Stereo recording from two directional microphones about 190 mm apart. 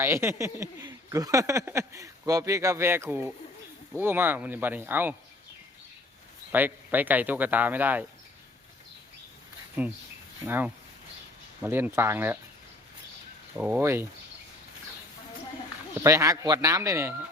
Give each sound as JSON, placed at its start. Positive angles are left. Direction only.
{"t": 0.0, "sound": "speech", "side_deg": -15}
{"t": 6.5, "sound": "speech", "side_deg": -10}
{"t": 9.8, "sound": "speech", "side_deg": -10}
{"t": 13.6, "sound": "speech", "side_deg": -10}
{"t": 16.0, "sound": "speech", "side_deg": -15}